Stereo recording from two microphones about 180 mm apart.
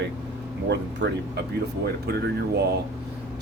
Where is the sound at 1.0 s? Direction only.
70° right (ahead or behind).